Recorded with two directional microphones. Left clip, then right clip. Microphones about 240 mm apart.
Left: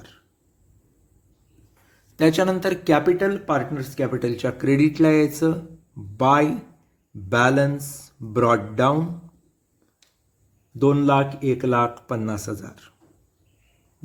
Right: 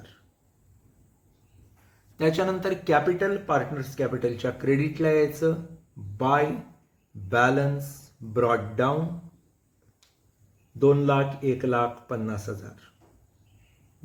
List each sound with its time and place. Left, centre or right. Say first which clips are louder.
2.1 s speech: left 5 dB; left
10.8 s speech: left 3 dB; left